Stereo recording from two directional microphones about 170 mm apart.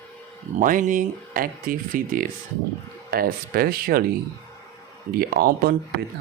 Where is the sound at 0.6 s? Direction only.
50° right (ahead or behind).